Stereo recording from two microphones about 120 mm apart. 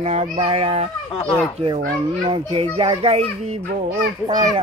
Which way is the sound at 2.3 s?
50° right (ahead or behind).